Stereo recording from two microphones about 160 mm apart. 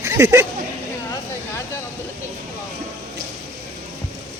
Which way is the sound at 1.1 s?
20° left (ahead or behind).